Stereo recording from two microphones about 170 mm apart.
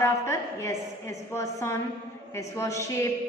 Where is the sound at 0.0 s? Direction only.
15° left (ahead or behind).